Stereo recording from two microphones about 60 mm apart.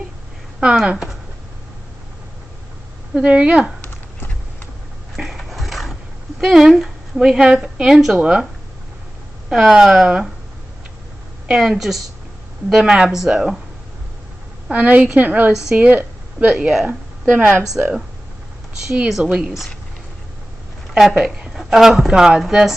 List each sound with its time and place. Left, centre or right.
0.8 s a woman's voice: centre
3.2 s a woman's voice: centre
5.1 s a sound: centre
6.4 s a woman's voice: centre
9.5 s a woman's voice: centre
11.4 s a woman's voice: centre
14.7 s a woman's voice: right
16.0 s a sound: right
17.3 s a woman's voice: right
17.7 s a woman's voice: centre
19.0 s a woman's voice: centre
20.9 s a woman's voice: centre